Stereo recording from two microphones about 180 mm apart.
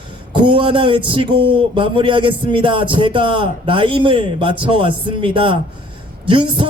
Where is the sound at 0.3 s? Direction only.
30° right (ahead or behind).